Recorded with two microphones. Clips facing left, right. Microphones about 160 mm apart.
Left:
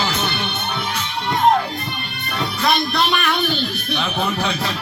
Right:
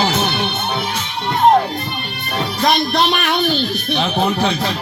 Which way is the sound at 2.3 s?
35° right (ahead or behind).